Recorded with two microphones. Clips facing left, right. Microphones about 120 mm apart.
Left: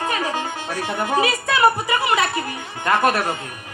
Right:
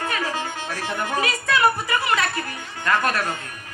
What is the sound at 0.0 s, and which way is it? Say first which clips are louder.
Music: left 3 dB; 15° left (ahead or behind).